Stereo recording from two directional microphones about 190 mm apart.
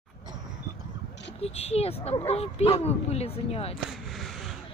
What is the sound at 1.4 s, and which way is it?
Speech, 35° left (ahead or behind).